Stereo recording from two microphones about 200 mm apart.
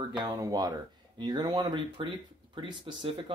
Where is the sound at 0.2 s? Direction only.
20° right (ahead or behind).